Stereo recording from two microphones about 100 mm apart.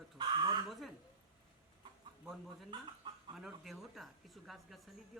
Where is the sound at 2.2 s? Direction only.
Centre (ahead or behind).